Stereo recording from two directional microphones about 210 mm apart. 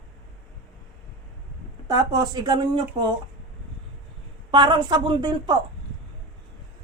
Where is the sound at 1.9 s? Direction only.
15° right (ahead or behind).